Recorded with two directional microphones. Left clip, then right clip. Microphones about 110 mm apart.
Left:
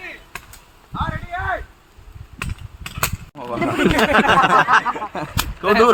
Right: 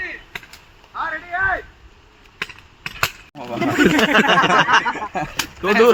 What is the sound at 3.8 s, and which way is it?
Speech, 20° left (ahead or behind).